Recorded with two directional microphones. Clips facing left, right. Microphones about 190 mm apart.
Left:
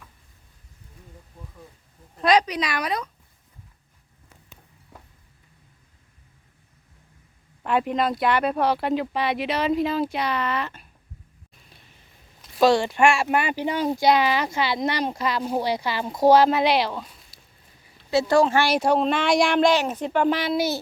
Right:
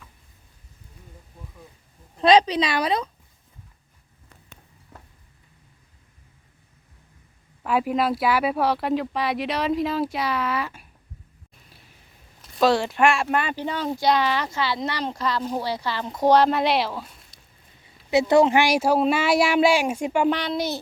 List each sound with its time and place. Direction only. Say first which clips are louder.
2.2 s speech: right 3 dB; 25° right (ahead or behind)
4.9 s a sound: even; centre (ahead or behind)
7.6 s speech: even; 5° right (ahead or behind)
11.7 s a sound: even; 5° right (ahead or behind)
12.5 s speech: left 1 dB; centre (ahead or behind)
13.2 s speech: left 2 dB; 10° left (ahead or behind)
18.1 s speech: right 2 dB; 20° right (ahead or behind)
20.3 s speech: left 2 dB; 5° left (ahead or behind)